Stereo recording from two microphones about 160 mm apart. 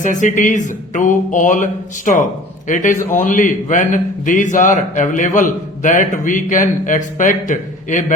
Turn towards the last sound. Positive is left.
turn(degrees=55)  # may be behind; listen again after turning